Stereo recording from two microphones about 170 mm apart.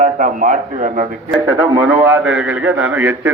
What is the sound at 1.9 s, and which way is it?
A man's voice, 10° right (ahead or behind).